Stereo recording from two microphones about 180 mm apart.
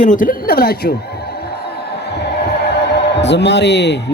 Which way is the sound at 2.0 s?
70° left (ahead or behind).